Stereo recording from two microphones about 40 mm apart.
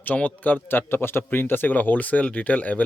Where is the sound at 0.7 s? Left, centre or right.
Left.